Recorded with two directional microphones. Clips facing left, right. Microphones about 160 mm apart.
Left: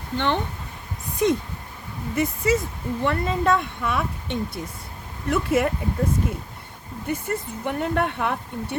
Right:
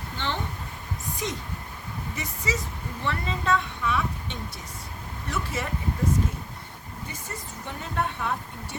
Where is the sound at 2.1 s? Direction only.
55° left (ahead or behind).